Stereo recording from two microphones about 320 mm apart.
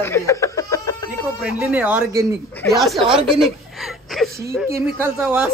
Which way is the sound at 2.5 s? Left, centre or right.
Centre.